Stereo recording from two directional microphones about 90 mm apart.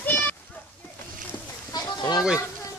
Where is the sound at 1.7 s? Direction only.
50° left (ahead or behind).